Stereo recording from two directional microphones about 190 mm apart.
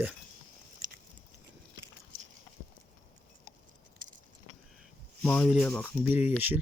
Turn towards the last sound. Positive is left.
turn(degrees=-10)  # may be behind; listen again after turning